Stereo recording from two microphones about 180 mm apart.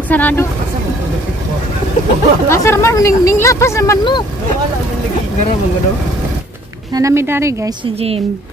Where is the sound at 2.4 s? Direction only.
15° left (ahead or behind).